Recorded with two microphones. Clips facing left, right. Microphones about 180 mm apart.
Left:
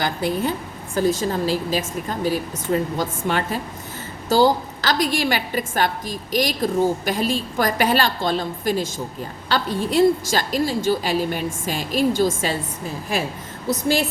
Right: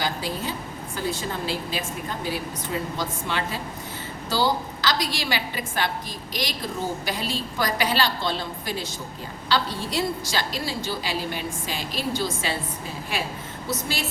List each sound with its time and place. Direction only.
0.0 s a woman's voice: 55° left (ahead or behind)
0.9 s a woman's voice: 40° left (ahead or behind)